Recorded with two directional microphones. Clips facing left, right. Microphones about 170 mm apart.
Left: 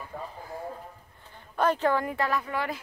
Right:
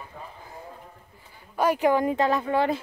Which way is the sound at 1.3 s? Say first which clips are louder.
Right 2 dB; 10° right (ahead or behind).